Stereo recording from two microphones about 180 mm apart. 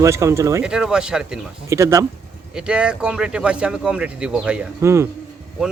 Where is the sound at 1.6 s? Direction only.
15° right (ahead or behind).